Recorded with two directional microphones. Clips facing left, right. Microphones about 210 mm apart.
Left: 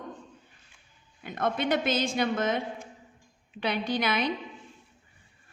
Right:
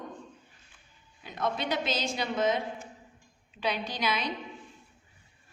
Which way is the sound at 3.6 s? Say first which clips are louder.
Left 3 dB; 60° left (ahead or behind).